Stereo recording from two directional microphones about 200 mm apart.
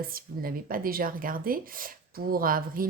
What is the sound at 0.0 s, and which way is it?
Speech, 45° right (ahead or behind).